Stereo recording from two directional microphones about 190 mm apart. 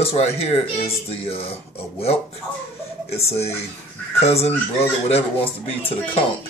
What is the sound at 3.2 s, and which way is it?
Speech, 35° left (ahead or behind).